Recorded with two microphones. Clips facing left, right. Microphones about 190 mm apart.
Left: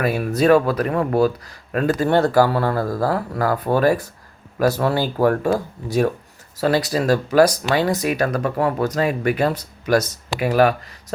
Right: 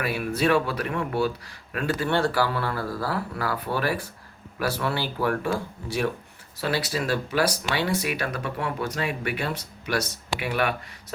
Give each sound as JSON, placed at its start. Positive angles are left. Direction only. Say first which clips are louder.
{"t": 0.0, "sound": "speech", "louder": "left 7 dB", "side_deg": 45}